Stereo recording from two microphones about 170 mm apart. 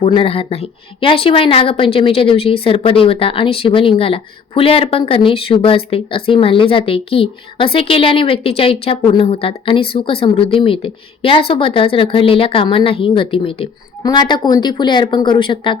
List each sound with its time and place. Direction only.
0.0 s speech: 35° left (ahead or behind)